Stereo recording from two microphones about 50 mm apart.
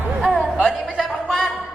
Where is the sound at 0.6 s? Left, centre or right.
Centre.